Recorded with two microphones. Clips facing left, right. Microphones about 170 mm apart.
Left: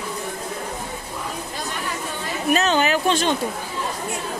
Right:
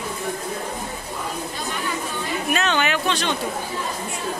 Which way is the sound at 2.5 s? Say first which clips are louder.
Left 4 dB; 35° left (ahead or behind).